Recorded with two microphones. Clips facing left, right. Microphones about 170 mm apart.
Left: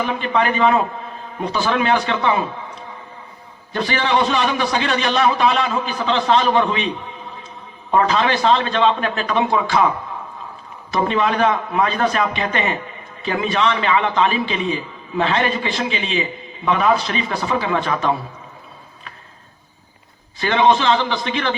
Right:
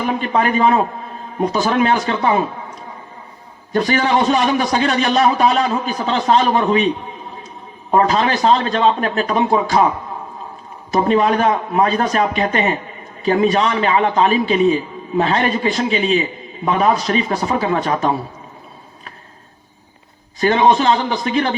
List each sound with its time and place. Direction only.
0.0 s a man's voice: 40° right (ahead or behind)
10.9 s a man's voice: 40° right (ahead or behind)
20.4 s a man's voice: 40° right (ahead or behind)